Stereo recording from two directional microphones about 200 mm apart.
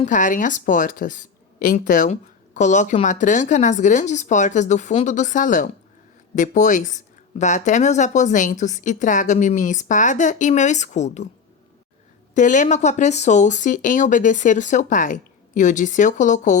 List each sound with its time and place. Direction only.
0.0 s speech: 40° left (ahead or behind)
12.3 s speech: 40° left (ahead or behind)